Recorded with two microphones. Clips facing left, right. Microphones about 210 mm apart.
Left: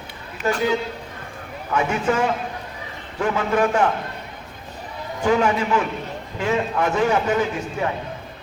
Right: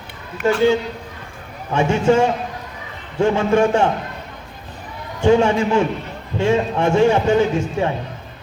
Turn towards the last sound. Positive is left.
turn(degrees=-25)  # may be behind; listen again after turning